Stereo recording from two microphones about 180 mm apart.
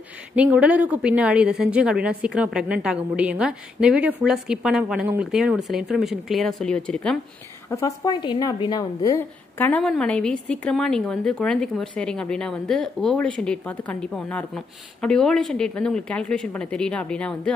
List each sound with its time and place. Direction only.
0.4 s a woman's voice: 5° right (ahead or behind)
7.7 s a woman's voice: 20° left (ahead or behind)